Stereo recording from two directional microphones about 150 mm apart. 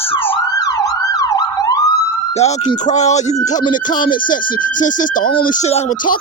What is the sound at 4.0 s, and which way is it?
Speech, 65° left (ahead or behind).